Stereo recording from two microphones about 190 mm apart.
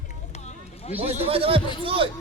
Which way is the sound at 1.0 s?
30° right (ahead or behind).